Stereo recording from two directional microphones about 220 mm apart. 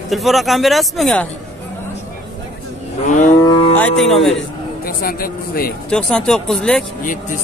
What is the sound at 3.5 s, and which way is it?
Cattle, 25° left (ahead or behind).